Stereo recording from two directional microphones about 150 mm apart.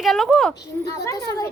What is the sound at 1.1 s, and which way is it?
Speech, 20° left (ahead or behind).